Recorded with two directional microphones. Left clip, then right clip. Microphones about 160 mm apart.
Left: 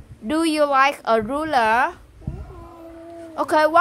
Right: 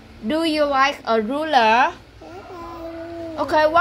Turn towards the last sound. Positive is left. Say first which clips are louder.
# even
turn(degrees=55)  # may be behind; listen again after turning